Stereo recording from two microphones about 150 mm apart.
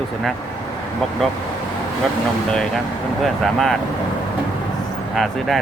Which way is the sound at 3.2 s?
Centre (ahead or behind).